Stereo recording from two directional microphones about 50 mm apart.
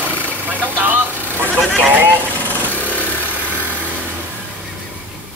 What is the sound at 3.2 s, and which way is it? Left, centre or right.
Vehicle, right.